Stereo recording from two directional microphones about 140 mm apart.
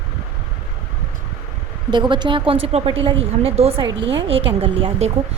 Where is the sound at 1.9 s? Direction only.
35° right (ahead or behind).